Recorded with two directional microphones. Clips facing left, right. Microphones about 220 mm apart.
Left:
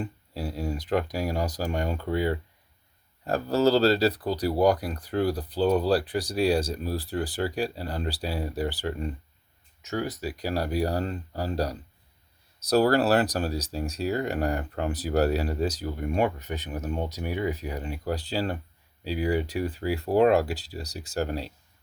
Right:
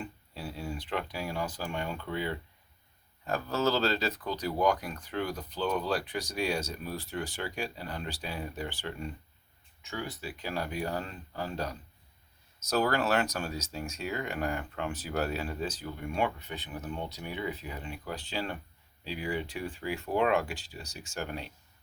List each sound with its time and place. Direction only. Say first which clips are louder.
0.0 s speech: left 7 dB; 40° left (ahead or behind)